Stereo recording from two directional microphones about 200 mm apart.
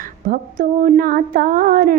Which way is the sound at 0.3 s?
40° right (ahead or behind).